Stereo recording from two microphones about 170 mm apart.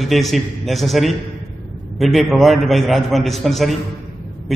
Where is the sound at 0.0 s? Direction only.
Centre (ahead or behind).